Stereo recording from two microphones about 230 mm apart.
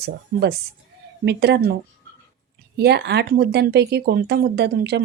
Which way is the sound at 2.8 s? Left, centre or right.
Right.